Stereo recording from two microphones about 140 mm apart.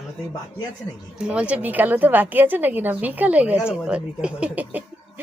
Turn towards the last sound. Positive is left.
turn(degrees=-10)  # may be behind; listen again after turning